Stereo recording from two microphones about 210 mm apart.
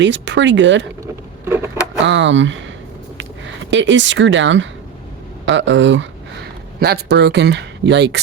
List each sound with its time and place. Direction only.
0.0 s speech: 60° right (ahead or behind)
1.0 s vehicle: 10° right (ahead or behind)
2.0 s speech: 60° right (ahead or behind)
3.7 s speech: 60° right (ahead or behind)
6.7 s speech: 50° right (ahead or behind)